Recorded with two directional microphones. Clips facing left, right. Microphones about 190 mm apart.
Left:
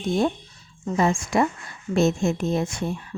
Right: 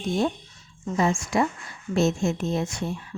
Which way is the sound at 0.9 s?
50° left (ahead or behind).